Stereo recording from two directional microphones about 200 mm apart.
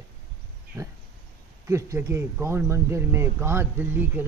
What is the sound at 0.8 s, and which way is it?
A man's voice, 15° right (ahead or behind).